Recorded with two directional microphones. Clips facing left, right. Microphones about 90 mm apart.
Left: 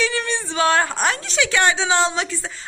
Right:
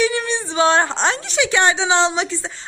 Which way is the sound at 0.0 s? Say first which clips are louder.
Right 3 dB; 20° right (ahead or behind).